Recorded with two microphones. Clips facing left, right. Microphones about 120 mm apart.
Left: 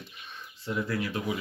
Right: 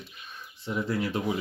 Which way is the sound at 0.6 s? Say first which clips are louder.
Right 2 dB; 25° right (ahead or behind).